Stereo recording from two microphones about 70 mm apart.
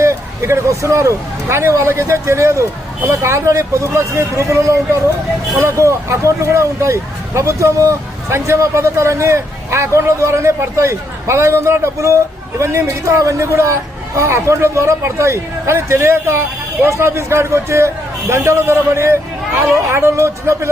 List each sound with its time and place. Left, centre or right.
0.0 s a man's voice: right